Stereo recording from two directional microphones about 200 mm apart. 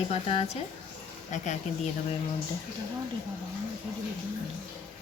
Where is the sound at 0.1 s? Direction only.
30° left (ahead or behind).